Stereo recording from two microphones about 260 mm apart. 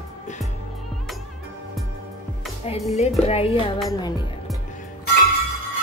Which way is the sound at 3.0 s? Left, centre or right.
Left.